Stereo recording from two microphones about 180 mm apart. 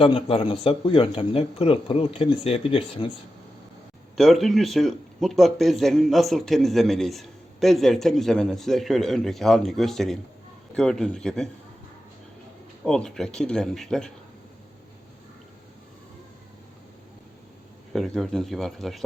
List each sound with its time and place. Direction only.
0.0 s speech: 30° left (ahead or behind)
4.2 s a man's voice: centre (ahead or behind)
12.8 s a man's voice: 5° left (ahead or behind)
17.9 s a man's voice: centre (ahead or behind)